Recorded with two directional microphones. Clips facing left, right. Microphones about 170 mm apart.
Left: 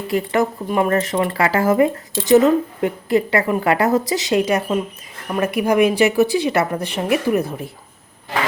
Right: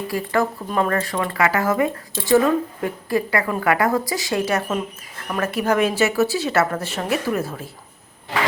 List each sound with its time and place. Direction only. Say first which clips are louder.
0.1 s speech: left 4 dB; 20° left (ahead or behind)